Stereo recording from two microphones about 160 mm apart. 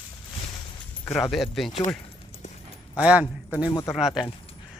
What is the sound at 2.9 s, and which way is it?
A man's voice, 10° right (ahead or behind).